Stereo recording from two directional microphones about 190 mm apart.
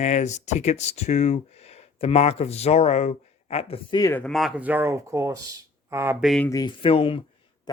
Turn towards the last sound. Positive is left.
turn(degrees=30)  # may be behind; listen again after turning